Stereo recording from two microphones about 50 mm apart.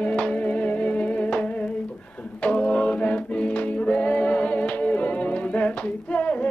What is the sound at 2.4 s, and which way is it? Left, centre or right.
Singing, left.